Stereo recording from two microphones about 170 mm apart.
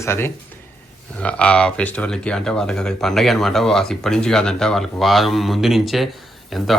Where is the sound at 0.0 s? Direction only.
15° left (ahead or behind).